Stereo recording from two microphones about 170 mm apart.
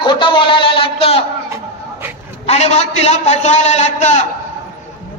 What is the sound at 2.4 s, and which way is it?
A man's voice, 40° left (ahead or behind).